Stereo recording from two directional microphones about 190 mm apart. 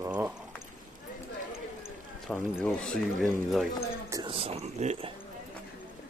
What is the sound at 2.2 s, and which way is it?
Speech, 5° left (ahead or behind).